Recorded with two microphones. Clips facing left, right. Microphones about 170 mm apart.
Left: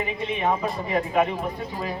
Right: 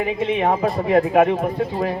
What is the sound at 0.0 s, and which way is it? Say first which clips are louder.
A man's voice: right 6 dB; 55° right (ahead or behind).